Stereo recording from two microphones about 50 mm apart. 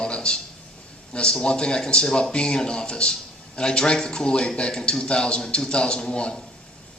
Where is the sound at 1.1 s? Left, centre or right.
Centre.